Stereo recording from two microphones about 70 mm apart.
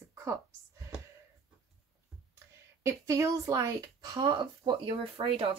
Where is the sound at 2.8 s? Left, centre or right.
Right.